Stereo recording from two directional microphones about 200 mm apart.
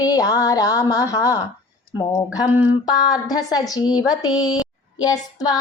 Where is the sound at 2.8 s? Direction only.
20° left (ahead or behind).